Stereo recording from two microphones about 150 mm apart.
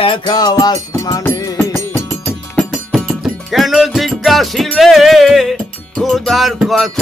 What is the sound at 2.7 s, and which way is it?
Music, centre (ahead or behind).